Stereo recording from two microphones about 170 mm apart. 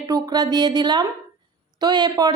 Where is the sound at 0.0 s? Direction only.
25° right (ahead or behind).